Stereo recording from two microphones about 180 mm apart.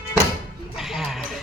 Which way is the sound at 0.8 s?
Centre (ahead or behind).